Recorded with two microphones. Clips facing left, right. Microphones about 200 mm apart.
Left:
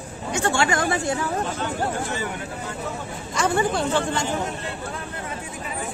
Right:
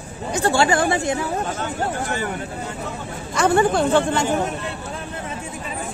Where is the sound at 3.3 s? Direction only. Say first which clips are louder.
Right 5 dB; 55° right (ahead or behind).